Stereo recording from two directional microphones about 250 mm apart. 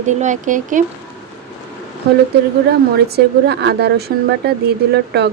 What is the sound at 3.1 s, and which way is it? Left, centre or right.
Speech, right.